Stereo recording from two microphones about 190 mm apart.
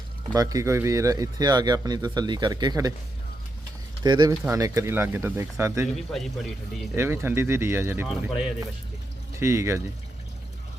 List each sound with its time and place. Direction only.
0.3 s speech: 20° right (ahead or behind)
4.0 s speech: 20° right (ahead or behind)
6.0 s a man's voice: centre (ahead or behind)
6.9 s speech: 10° right (ahead or behind)
8.0 s a man's voice: centre (ahead or behind)
9.4 s speech: 15° right (ahead or behind)